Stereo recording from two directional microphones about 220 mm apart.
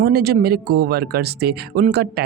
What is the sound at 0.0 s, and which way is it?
Speech, 45° right (ahead or behind).